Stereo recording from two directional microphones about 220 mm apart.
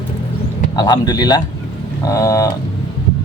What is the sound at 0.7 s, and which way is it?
Speech, 20° left (ahead or behind).